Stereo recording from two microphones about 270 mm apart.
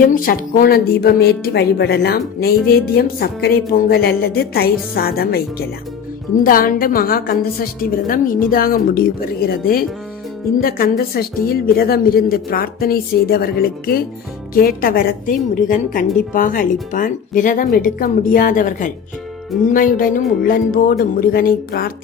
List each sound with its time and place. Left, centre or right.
0.0 s a woman's voice: left